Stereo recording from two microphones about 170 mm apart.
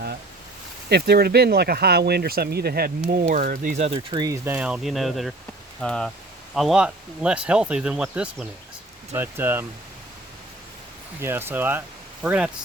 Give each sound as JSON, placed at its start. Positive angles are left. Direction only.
{"t": 0.9, "sound": "speech", "side_deg": -70}
{"t": 11.2, "sound": "speech", "side_deg": -15}